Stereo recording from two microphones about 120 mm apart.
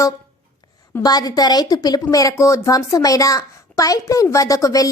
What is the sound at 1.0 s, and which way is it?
A woman's voice, 30° left (ahead or behind).